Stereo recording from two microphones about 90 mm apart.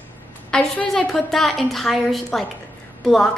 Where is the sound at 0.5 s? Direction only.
5° left (ahead or behind).